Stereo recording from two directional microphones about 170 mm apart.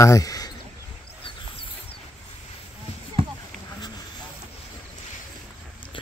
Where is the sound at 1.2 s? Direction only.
30° left (ahead or behind).